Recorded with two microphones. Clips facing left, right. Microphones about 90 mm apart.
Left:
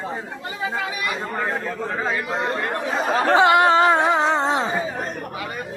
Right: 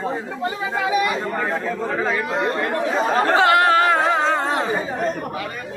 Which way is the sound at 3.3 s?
20° left (ahead or behind).